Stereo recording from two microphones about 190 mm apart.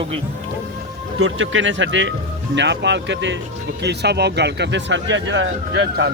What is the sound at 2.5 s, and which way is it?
Speech, 65° right (ahead or behind).